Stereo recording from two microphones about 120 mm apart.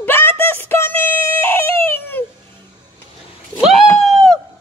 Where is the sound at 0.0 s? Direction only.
20° left (ahead or behind).